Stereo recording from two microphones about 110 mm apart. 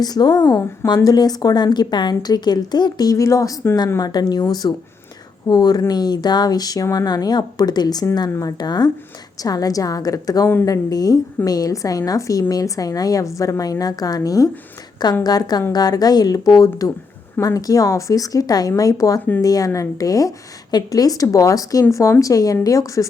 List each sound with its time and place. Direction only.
0.0 s speech: 40° left (ahead or behind)
4.0 s speech: 40° left (ahead or behind)